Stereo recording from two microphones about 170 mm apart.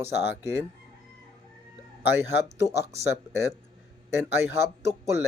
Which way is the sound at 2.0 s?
15° right (ahead or behind).